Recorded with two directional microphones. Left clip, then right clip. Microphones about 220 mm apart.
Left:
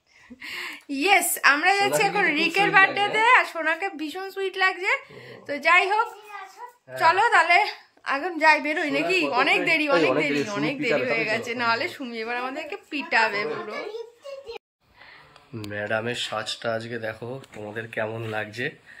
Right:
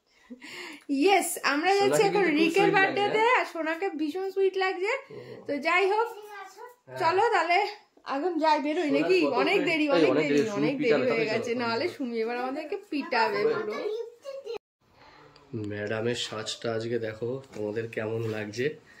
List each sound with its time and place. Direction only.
0.4 s a woman's voice: 10° right (ahead or behind)
9.8 s a woman's voice: 30° left (ahead or behind)
10.5 s a woman's voice: 5° right (ahead or behind)
15.6 s a woman's voice: 5° right (ahead or behind)